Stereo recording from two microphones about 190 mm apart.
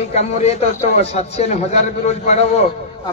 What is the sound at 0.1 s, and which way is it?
A man's voice, 35° left (ahead or behind).